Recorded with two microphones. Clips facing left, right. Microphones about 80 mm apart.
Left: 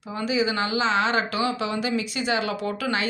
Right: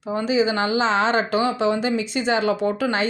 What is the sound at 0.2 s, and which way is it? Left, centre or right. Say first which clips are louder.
Speech: right 3 dB; right.